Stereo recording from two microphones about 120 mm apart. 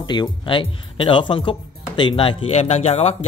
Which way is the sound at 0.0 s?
35° left (ahead or behind).